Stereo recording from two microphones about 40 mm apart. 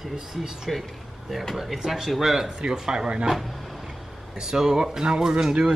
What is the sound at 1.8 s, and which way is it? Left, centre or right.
Speech, centre.